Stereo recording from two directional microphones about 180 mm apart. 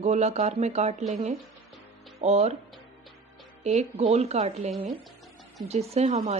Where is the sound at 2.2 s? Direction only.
35° right (ahead or behind).